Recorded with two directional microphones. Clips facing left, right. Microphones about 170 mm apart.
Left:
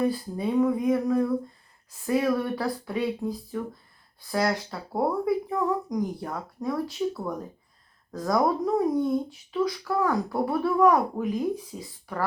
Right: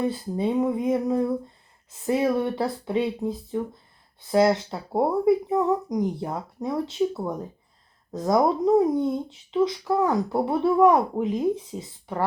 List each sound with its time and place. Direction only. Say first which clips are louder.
0.0 s speech: right 1 dB; 25° right (ahead or behind)